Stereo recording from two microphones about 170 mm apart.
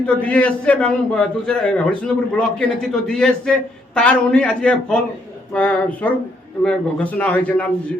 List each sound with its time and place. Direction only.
0.0 s a man's voice: 5° left (ahead or behind)